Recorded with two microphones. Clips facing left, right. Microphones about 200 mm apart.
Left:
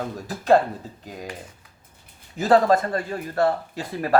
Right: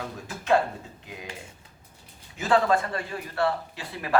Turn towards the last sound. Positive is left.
turn(degrees=40)  # may be behind; listen again after turning